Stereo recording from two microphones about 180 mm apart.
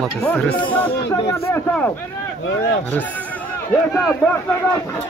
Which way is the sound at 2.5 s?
85° left.